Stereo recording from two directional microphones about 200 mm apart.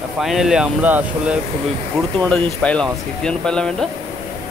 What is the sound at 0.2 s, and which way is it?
Speech, centre (ahead or behind).